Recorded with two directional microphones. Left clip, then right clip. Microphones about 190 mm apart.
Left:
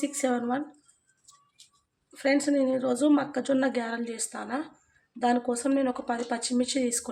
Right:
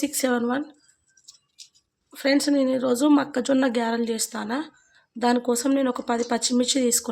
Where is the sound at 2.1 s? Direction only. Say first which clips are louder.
Right 3 dB; 35° right (ahead or behind).